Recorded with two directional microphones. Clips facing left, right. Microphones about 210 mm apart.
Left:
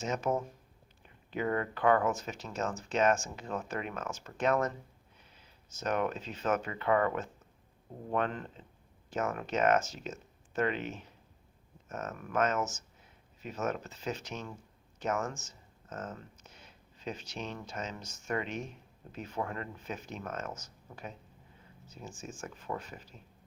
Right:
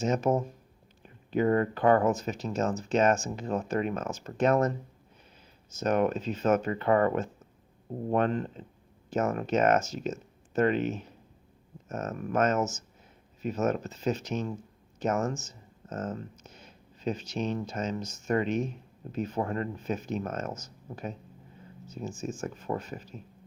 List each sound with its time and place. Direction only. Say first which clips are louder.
0.0 s speech: right 6 dB; 40° right (ahead or behind)
5.8 s speech: right 6 dB; 40° right (ahead or behind)